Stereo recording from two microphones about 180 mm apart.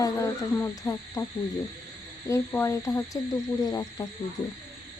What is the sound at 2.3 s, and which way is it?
Owl, 15° left (ahead or behind).